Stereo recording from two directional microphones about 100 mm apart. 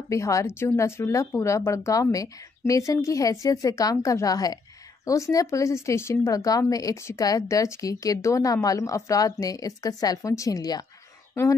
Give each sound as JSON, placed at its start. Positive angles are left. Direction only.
{"t": 0.1, "sound": "speech", "side_deg": 30}